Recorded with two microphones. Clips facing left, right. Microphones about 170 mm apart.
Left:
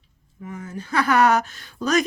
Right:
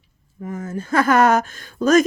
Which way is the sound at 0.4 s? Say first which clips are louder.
Right 6 dB; 45° right (ahead or behind).